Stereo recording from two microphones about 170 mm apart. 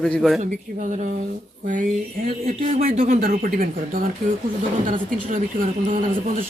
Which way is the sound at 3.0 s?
55° right (ahead or behind).